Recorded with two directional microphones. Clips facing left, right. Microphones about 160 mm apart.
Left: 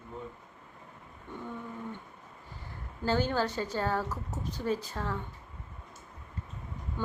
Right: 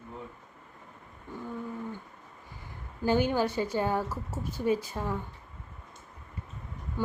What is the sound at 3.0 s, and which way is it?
A woman's voice, 15° right (ahead or behind).